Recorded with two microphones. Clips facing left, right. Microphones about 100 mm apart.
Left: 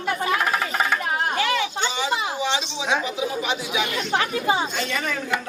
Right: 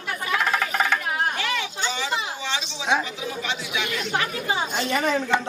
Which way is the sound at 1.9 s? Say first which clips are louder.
Left 4 dB; 15° left (ahead or behind).